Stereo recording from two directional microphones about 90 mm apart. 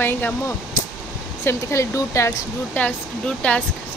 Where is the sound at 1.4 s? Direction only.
35° left (ahead or behind).